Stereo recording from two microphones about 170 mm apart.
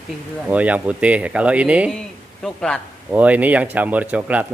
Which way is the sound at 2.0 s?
5° left (ahead or behind).